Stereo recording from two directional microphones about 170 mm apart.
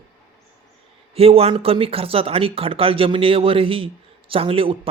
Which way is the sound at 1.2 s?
35° right (ahead or behind).